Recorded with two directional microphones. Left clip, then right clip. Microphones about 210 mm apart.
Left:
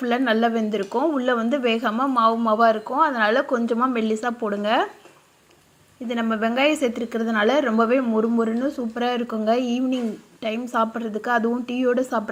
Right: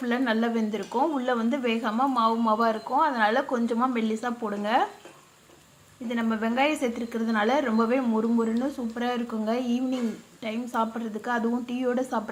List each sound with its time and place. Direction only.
0.0 s speech: 20° left (ahead or behind)
6.1 s speech: 20° left (ahead or behind)